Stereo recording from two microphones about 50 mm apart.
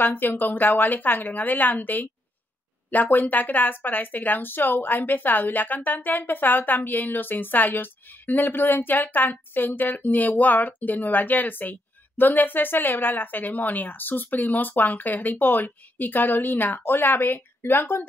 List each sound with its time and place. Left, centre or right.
0.0 s speech: left